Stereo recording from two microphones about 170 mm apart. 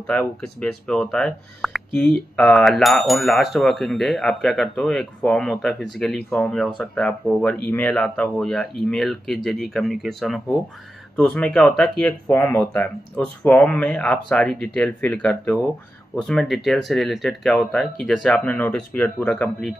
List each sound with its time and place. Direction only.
0.0 s speech: 5° left (ahead or behind)